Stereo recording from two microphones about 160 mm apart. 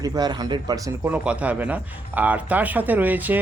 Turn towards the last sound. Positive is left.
turn(degrees=-10)  # may be behind; listen again after turning